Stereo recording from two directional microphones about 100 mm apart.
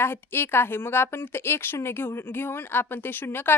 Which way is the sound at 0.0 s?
20° left (ahead or behind).